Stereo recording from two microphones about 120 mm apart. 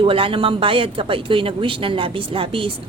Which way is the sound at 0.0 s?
50° right (ahead or behind).